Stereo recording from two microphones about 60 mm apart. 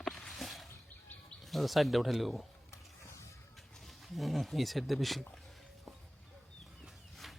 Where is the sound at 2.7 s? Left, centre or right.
Left.